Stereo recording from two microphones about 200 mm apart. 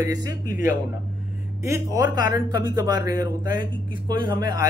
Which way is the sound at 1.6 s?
15° right (ahead or behind).